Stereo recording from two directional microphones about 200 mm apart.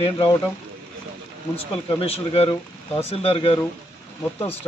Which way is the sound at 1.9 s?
30° left (ahead or behind).